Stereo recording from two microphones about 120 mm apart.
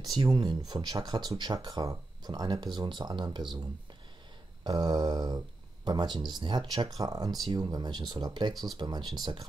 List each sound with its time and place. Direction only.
0.0 s speech: 35° right (ahead or behind)
4.6 s speech: 35° right (ahead or behind)